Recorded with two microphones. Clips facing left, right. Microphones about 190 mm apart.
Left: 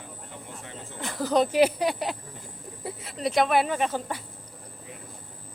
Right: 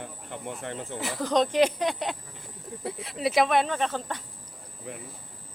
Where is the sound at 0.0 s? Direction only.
60° right (ahead or behind).